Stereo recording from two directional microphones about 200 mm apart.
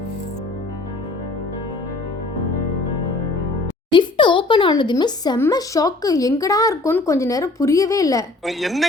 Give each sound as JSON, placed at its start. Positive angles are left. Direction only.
{"t": 3.9, "sound": "speech", "side_deg": 25}
{"t": 8.4, "sound": "a woman's voice", "side_deg": 0}